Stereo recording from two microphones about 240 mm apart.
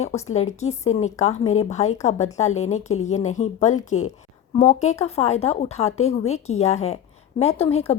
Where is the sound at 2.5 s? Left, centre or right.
Left.